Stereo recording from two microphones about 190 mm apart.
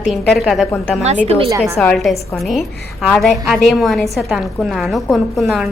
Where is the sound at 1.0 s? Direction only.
35° right (ahead or behind).